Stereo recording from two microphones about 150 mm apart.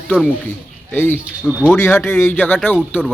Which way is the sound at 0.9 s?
15° left (ahead or behind).